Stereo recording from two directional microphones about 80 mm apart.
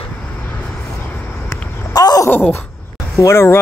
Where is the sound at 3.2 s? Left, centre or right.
Left.